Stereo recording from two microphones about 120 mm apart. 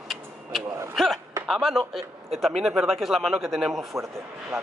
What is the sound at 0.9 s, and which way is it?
A man's voice, centre (ahead or behind).